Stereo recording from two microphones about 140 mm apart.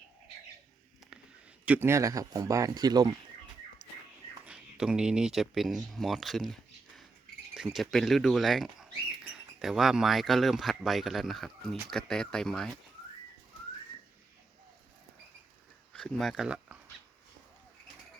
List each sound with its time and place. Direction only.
1.6 s speech: 15° right (ahead or behind); by 3.1 s 30° right (ahead or behind)
4.4 s speech: 5° right (ahead or behind)
15.9 s speech: 5° left (ahead or behind)